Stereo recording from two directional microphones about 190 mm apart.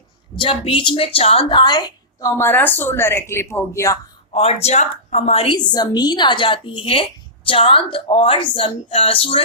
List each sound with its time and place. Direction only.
0.3 s a woman's voice: 30° left (ahead or behind)
4.3 s a woman's voice: 30° left (ahead or behind)